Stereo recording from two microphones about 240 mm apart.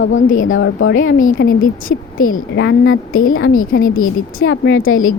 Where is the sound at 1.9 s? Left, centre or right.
Left.